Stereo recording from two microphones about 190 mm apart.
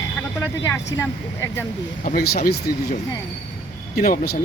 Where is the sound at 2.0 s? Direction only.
50° left (ahead or behind).